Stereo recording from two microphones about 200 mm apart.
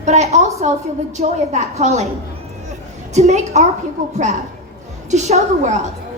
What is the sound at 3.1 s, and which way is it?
Speech, 30° right (ahead or behind).